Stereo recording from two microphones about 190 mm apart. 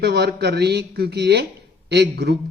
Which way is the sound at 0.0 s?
60° right (ahead or behind).